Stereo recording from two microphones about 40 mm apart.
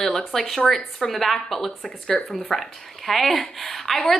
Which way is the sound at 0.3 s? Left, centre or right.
Centre.